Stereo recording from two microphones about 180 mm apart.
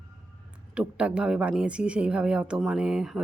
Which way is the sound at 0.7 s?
5° right (ahead or behind).